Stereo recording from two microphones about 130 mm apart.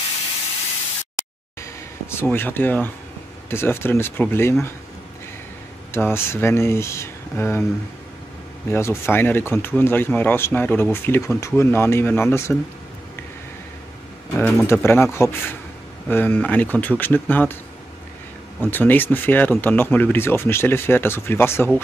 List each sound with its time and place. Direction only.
1.6 s speech: 20° left (ahead or behind)
5.9 s speech: 20° left (ahead or behind)
8.6 s speech: 20° left (ahead or behind)
14.3 s speech: 15° left (ahead or behind)
18.6 s speech: 15° left (ahead or behind)